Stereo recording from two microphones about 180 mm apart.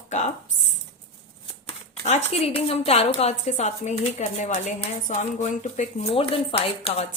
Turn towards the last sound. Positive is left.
turn(degrees=30)  # may be behind; listen again after turning